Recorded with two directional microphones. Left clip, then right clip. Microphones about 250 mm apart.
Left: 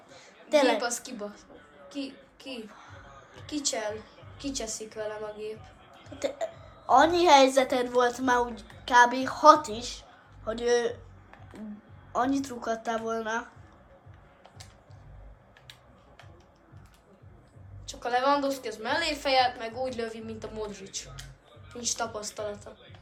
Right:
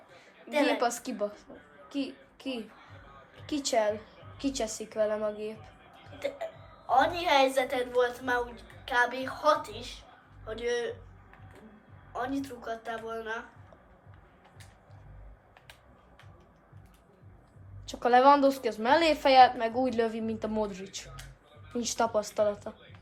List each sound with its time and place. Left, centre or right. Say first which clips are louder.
0.6 s a woman's voice: left 2 dB; right
6.1 s speech: left 3 dB; left
12.1 s speech: left 6 dB; left
17.8 s a woman's voice: right 5 dB; right